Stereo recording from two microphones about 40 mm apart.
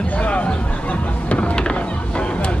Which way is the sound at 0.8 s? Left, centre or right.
Left.